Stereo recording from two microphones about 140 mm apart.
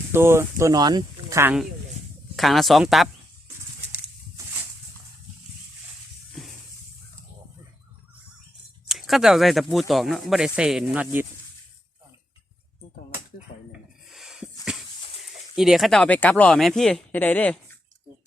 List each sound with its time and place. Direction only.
0.1 s speech: 15° right (ahead or behind)
2.3 s speech: centre (ahead or behind)
8.9 s speech: centre (ahead or behind)
13.5 s a sound: 60° left (ahead or behind)
14.1 s a sound: centre (ahead or behind)
15.5 s speech: 5° right (ahead or behind)